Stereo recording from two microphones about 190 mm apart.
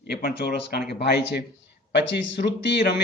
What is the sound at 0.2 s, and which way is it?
A man's voice, 55° left (ahead or behind).